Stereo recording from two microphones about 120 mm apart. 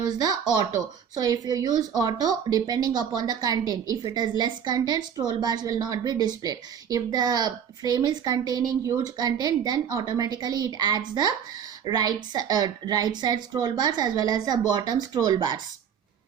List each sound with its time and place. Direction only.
0.1 s a woman's voice: 30° right (ahead or behind)